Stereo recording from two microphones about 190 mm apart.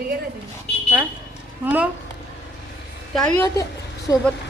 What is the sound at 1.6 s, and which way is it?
Speech, 5° right (ahead or behind).